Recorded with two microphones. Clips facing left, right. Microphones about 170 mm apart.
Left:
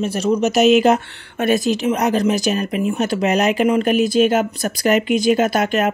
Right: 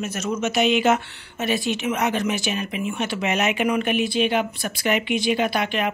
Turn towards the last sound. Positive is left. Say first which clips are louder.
# left 6 dB
turn(degrees=45)  # may be behind; listen again after turning